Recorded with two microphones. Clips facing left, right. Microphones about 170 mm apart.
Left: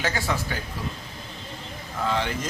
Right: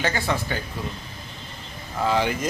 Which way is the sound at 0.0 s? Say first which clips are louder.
Right 2 dB; 5° left (ahead or behind).